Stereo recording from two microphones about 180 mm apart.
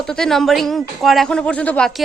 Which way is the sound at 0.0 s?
5° left (ahead or behind).